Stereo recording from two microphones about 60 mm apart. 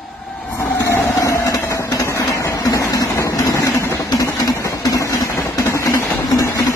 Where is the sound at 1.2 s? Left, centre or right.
Left.